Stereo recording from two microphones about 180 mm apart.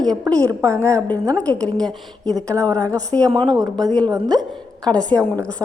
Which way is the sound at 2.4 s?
15° right (ahead or behind).